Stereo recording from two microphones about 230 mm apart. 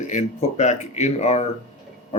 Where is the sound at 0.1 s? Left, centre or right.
Left.